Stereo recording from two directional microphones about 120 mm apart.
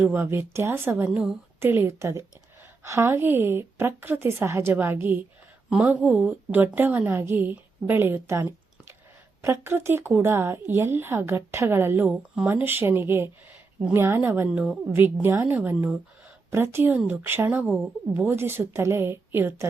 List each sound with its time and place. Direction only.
0.0 s a woman's voice: 15° right (ahead or behind)
14.5 s a woman's voice: 5° right (ahead or behind)
14.8 s a woman's voice: 20° right (ahead or behind)